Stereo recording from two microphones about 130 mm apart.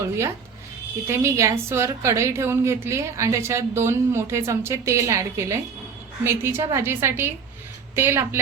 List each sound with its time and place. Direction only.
1.0 s a woman's voice: 20° right (ahead or behind)